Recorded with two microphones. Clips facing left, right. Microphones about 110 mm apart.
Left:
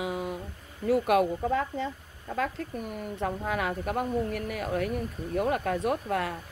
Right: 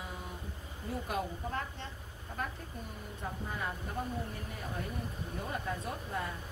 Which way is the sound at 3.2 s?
80° left.